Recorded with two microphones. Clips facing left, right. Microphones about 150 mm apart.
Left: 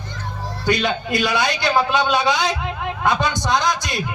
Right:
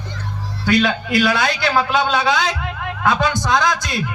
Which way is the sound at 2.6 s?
20° left (ahead or behind).